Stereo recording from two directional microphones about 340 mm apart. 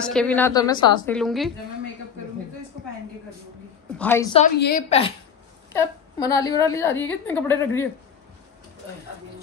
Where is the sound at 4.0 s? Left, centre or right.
Centre.